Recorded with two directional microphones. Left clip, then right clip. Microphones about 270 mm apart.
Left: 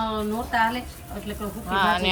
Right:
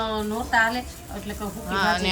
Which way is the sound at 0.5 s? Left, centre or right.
Right.